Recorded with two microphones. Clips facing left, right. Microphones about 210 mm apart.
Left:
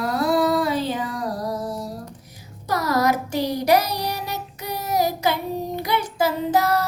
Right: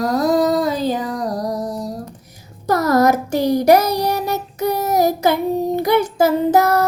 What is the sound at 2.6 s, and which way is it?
Child singing, 50° right (ahead or behind).